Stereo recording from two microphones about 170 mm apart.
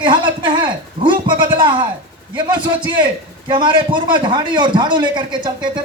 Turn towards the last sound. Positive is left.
turn(degrees=-25)  # may be behind; listen again after turning